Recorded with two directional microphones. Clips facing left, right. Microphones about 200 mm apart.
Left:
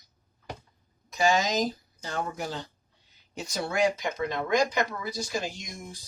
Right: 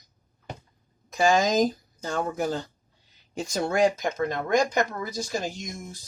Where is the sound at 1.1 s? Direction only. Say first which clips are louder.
Right 4 dB; 50° right (ahead or behind).